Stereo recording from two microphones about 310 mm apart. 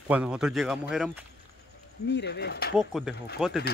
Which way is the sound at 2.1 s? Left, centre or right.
Left.